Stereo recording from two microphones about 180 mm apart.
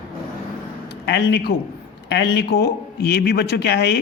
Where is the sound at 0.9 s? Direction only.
65° left (ahead or behind).